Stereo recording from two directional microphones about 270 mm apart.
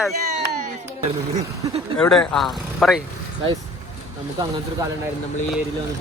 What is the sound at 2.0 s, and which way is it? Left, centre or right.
Speech, centre.